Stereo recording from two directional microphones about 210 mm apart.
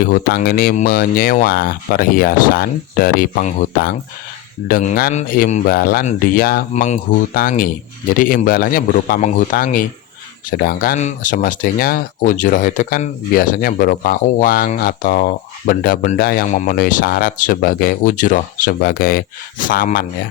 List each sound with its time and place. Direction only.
0.0 s a man's voice: 45° left (ahead or behind)